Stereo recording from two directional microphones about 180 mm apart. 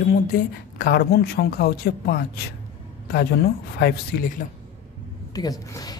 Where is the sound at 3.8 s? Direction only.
60° left (ahead or behind).